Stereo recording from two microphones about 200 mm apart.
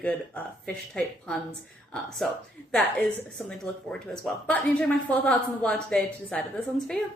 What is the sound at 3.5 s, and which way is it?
A woman's voice, 5° left (ahead or behind).